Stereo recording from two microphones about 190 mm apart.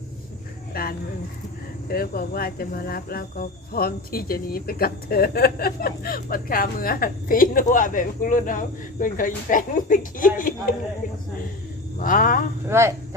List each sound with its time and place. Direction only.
0.7 s a sound: 50° left (ahead or behind)
1.9 s speech: 50° left (ahead or behind)
11.9 s speech: 45° left (ahead or behind)
12.6 s speech: 15° right (ahead or behind)